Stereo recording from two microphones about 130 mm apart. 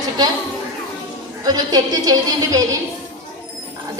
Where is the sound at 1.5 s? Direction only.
30° right (ahead or behind).